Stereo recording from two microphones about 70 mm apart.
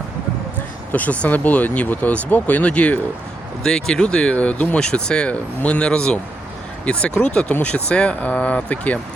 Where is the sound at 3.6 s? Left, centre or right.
Centre.